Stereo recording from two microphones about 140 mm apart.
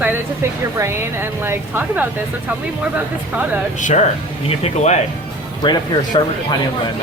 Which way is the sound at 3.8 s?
60° left (ahead or behind).